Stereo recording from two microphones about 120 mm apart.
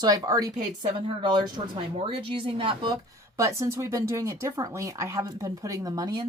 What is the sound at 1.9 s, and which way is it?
Speech, 45° right (ahead or behind).